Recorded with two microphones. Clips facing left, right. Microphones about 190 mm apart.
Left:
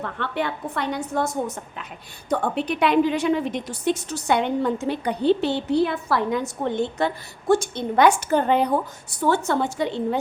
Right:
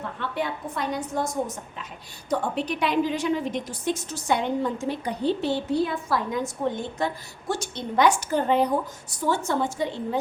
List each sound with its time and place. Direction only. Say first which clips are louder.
0.0 s a woman's voice: left 3 dB; 70° left (ahead or behind)
2.3 s a woman's voice: left 3 dB; 60° left (ahead or behind)